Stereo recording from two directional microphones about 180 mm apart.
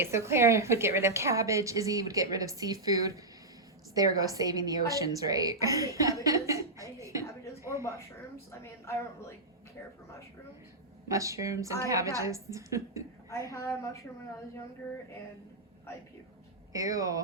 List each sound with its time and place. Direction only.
0.0 s a woman's voice: 15° right (ahead or behind)
7.0 s a sound: 15° right (ahead or behind)
8.4 s a woman's voice: 15° left (ahead or behind)
11.1 s a woman's voice: 15° right (ahead or behind)
13.3 s a woman's voice: 15° left (ahead or behind)
16.7 s speech: 20° right (ahead or behind)